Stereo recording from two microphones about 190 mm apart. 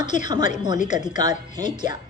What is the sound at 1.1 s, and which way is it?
Speech, 20° right (ahead or behind).